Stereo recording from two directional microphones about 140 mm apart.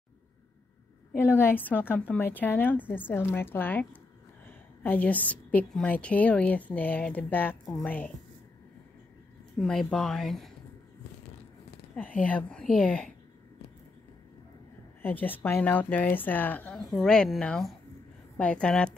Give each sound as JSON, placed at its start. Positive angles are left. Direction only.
{"t": 1.1, "sound": "a woman's voice", "side_deg": 15}
{"t": 7.6, "sound": "a woman's voice", "side_deg": 0}
{"t": 9.6, "sound": "a woman's voice", "side_deg": 5}
{"t": 12.2, "sound": "a woman's voice", "side_deg": 10}
{"t": 15.0, "sound": "a woman's voice", "side_deg": 15}
{"t": 16.8, "sound": "a woman's voice", "side_deg": 0}